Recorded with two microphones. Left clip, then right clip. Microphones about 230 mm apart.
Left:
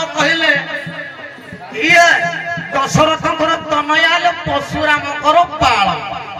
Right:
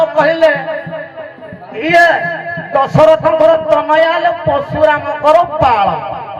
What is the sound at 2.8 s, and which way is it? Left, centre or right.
Speech, left.